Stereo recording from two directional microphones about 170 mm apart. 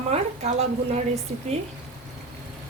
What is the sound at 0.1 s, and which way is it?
Speech, 40° right (ahead or behind).